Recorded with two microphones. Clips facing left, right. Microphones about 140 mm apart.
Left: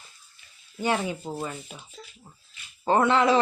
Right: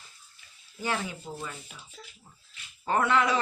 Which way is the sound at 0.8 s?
20° left (ahead or behind).